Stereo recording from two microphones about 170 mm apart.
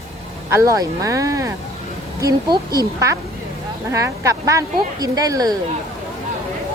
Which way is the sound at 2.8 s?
20° right (ahead or behind).